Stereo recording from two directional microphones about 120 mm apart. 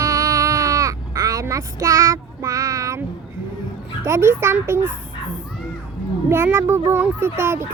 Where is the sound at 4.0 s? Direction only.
25° right (ahead or behind).